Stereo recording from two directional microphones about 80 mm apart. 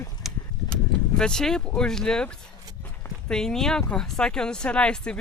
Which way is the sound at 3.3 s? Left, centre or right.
Centre.